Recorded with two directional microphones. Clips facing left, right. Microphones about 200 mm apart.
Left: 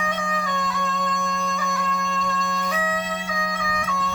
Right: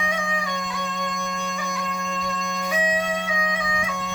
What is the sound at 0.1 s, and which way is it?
Music, 15° right (ahead or behind).